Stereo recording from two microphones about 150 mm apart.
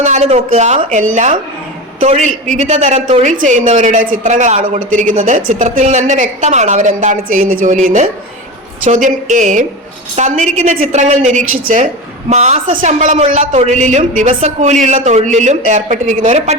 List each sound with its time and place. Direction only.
0.0 s a man's voice: 50° right (ahead or behind)